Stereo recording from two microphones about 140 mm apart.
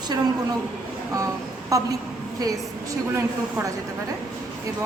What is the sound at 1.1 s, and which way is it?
Speech, 25° right (ahead or behind).